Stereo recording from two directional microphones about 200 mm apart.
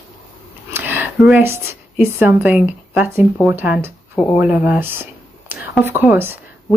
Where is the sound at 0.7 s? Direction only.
10° right (ahead or behind).